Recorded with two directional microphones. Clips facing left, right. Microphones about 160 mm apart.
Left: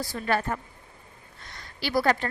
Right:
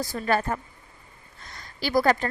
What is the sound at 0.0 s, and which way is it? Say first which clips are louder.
Speech: right 2 dB; 40° right (ahead or behind).